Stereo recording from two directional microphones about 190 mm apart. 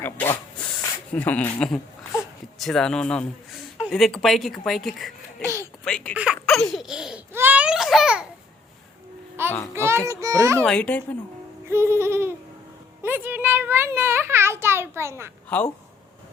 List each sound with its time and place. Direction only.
0.0 s speech: 10° left (ahead or behind)
6.1 s baby laughter: 5° right (ahead or behind)
9.4 s a sound: 10° right (ahead or behind)
9.7 s a child's voice: 15° right (ahead or behind)
10.6 s speech: 5° left (ahead or behind)
11.7 s a child's voice: 15° right (ahead or behind)
15.4 s speech: 5° left (ahead or behind)